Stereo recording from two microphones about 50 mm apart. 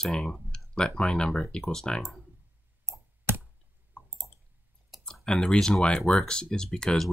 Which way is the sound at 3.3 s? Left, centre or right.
Right.